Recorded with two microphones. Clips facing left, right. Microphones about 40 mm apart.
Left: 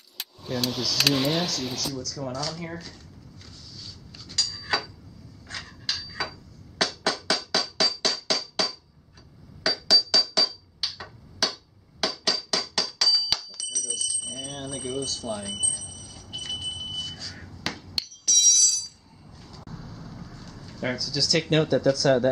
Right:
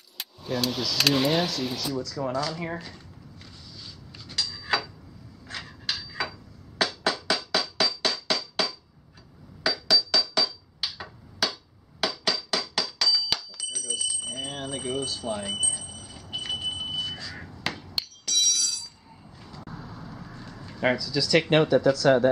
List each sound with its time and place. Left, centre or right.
0.2 s speech: centre
3.4 s a sound: centre
5.5 s hammer: centre
9.6 s music: centre
17.9 s bicycle bell: centre
19.3 s a sound: centre